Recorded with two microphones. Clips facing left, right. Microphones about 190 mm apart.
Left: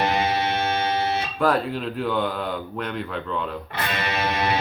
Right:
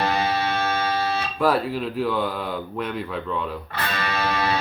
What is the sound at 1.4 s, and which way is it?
Speech, 5° right (ahead or behind).